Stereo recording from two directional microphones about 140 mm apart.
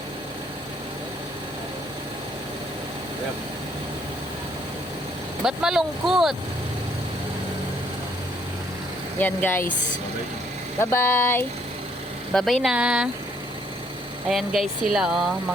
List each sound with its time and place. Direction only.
5.4 s speech: 5° right (ahead or behind)
9.1 s speech: 15° left (ahead or behind)
10.8 s speech: 15° left (ahead or behind)
12.3 s speech: 5° left (ahead or behind)
12.6 s speech: 10° right (ahead or behind)
14.3 s speech: centre (ahead or behind)